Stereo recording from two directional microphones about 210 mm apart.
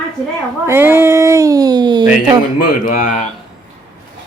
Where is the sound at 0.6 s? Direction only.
10° right (ahead or behind).